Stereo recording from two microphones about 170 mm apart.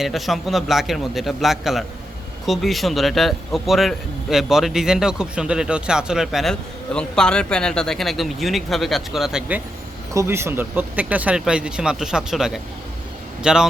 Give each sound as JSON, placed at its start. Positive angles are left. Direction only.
{"t": 0.0, "sound": "a man's voice", "side_deg": 0}
{"t": 10.2, "sound": "a man's voice", "side_deg": -15}